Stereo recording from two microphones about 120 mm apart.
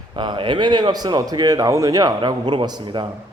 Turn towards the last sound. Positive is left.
turn(degrees=-35)  # may be behind; listen again after turning